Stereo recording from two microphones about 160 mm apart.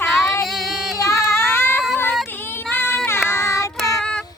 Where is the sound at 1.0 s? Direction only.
15° left (ahead or behind).